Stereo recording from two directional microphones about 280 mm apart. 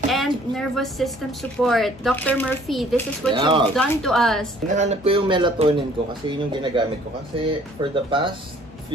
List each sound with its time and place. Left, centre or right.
0.1 s a woman's voice: centre
3.3 s speech: centre
3.7 s speech: centre
4.7 s speech: right